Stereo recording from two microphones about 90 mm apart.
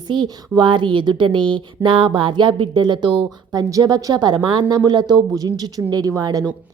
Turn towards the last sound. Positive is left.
turn(degrees=-40)  # may be behind; listen again after turning